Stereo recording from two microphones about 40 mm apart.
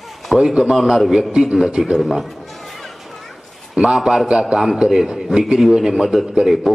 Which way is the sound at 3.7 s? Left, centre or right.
Centre.